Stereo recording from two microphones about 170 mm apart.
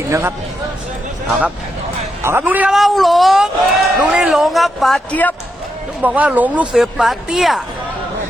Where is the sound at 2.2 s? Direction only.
15° right (ahead or behind); by 5.3 s 10° left (ahead or behind).